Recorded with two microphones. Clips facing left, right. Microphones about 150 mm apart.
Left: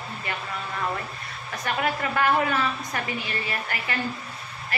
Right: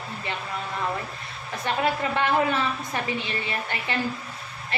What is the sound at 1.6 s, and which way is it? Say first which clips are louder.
A woman's voice: right 2 dB; 25° right (ahead or behind).